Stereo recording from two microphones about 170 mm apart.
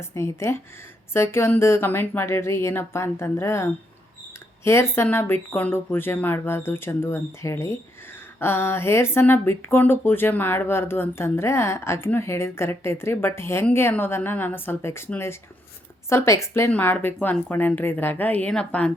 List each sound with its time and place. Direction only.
0.0 s speech: 15° left (ahead or behind)